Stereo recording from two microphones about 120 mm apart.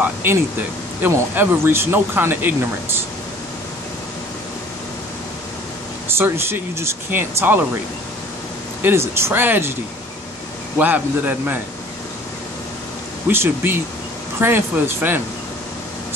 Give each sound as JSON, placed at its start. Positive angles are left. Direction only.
{"t": 0.0, "sound": "speech", "side_deg": -20}
{"t": 6.0, "sound": "speech", "side_deg": -20}
{"t": 8.8, "sound": "speech", "side_deg": -20}
{"t": 10.8, "sound": "a man's voice", "side_deg": -15}
{"t": 13.3, "sound": "a man's voice", "side_deg": -20}